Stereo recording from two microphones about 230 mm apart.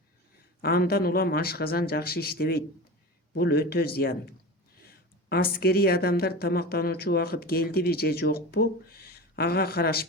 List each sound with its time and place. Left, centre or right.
0.6 s speech: left